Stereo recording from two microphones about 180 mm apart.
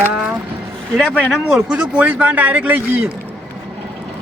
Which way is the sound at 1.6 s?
5° right (ahead or behind).